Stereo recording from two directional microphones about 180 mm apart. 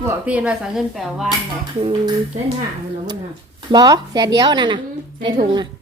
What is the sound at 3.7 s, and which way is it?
Speech, 20° right (ahead or behind).